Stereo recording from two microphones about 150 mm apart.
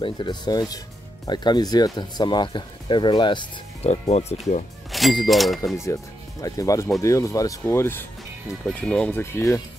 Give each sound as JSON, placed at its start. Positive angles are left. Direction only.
{"t": 0.0, "sound": "speech", "side_deg": 30}
{"t": 3.8, "sound": "speech", "side_deg": 45}
{"t": 4.9, "sound": "a sound", "side_deg": 0}
{"t": 5.3, "sound": "speech", "side_deg": 0}
{"t": 6.4, "sound": "speech", "side_deg": 20}